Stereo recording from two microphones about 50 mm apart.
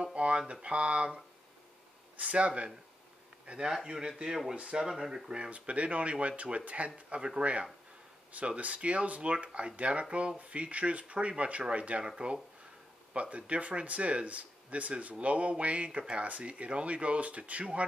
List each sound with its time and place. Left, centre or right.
0.0 s speech: right
5.5 s speech: right